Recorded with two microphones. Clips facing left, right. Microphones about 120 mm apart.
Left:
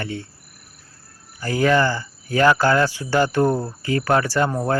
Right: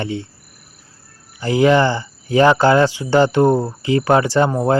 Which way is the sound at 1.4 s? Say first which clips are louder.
Right 5 dB; 20° right (ahead or behind).